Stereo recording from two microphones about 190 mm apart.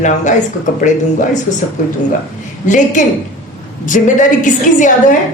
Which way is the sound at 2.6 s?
40° left (ahead or behind).